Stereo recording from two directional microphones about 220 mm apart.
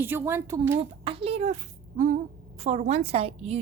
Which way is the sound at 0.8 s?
25° right (ahead or behind).